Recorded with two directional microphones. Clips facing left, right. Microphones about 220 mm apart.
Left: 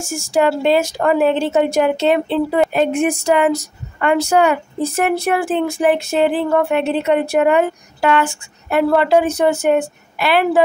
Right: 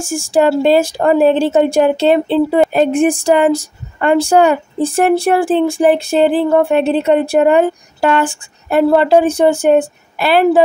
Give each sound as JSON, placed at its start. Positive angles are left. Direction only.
{"t": 0.0, "sound": "a woman's voice", "side_deg": -30}